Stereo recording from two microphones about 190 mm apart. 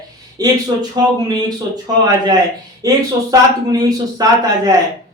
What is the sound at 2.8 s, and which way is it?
Speech, 20° right (ahead or behind).